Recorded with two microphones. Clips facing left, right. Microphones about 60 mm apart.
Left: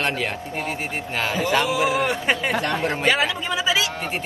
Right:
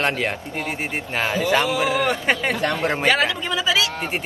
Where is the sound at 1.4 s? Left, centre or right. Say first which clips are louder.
Right 1 dB; centre.